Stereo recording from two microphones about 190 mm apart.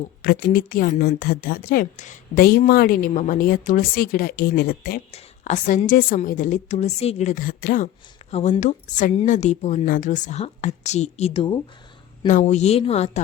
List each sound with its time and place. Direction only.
0.2 s a woman's voice: 50° left (ahead or behind)
8.3 s a woman's voice: 35° left (ahead or behind)
12.3 s a woman's voice: 40° left (ahead or behind)